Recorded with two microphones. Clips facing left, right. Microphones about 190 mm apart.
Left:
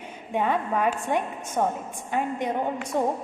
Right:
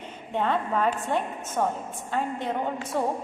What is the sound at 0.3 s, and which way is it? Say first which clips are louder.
A woman's voice: left 1 dB; 10° left (ahead or behind).